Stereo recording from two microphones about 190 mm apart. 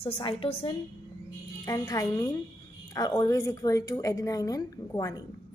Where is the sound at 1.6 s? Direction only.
15° left (ahead or behind).